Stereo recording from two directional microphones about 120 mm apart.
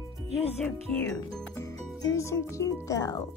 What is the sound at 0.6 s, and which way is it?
Speech, 10° left (ahead or behind).